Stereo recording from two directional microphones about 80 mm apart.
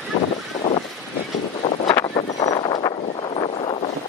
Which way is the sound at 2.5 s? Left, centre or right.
Left.